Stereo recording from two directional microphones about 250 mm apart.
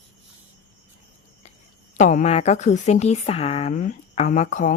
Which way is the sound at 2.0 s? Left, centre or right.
Left.